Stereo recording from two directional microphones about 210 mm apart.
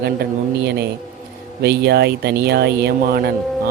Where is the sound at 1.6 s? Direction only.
50° right (ahead or behind).